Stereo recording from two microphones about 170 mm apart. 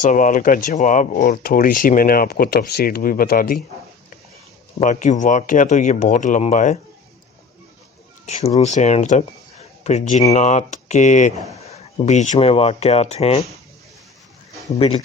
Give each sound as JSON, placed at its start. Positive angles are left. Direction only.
{"t": 0.0, "sound": "speech", "side_deg": 50}
{"t": 4.8, "sound": "speech", "side_deg": 45}
{"t": 8.3, "sound": "speech", "side_deg": 40}
{"t": 14.8, "sound": "speech", "side_deg": 35}